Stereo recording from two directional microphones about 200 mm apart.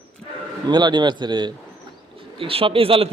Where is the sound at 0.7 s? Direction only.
20° right (ahead or behind).